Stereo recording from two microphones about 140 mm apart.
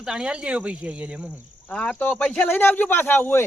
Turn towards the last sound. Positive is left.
turn(degrees=15)  # may be behind; listen again after turning